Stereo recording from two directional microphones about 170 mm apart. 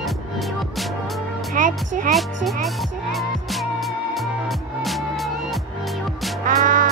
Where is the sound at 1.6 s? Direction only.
50° right (ahead or behind).